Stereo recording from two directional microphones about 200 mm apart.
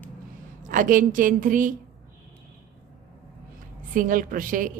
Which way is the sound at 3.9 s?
45° right (ahead or behind).